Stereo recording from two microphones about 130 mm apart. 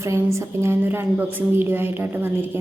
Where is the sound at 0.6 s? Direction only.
20° right (ahead or behind).